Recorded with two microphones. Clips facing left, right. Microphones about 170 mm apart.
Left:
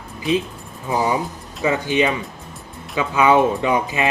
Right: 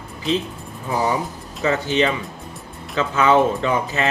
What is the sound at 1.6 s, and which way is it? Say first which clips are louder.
Speech: left 1 dB; 15° left (ahead or behind).